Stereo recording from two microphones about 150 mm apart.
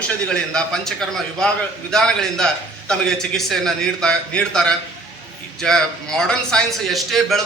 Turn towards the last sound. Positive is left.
turn(degrees=0)  # may be behind; listen again after turning